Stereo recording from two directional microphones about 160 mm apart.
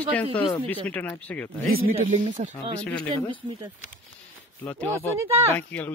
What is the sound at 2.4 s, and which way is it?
Speech, 50° right (ahead or behind).